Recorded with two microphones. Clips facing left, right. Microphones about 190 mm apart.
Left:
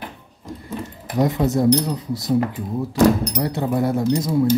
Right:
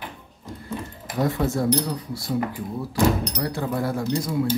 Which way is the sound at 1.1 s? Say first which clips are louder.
Left 4 dB; 20° left (ahead or behind).